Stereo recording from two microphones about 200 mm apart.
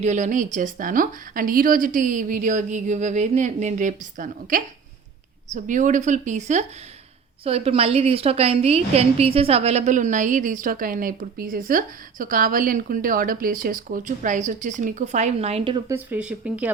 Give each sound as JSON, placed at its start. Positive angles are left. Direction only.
{"t": 0.0, "sound": "a woman's voice", "side_deg": -35}
{"t": 15.9, "sound": "speech", "side_deg": -10}